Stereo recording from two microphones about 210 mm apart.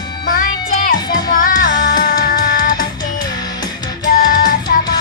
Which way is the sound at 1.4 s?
40° left (ahead or behind).